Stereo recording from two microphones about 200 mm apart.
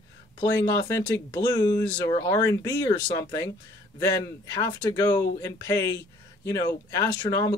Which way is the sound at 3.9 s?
20° left (ahead or behind).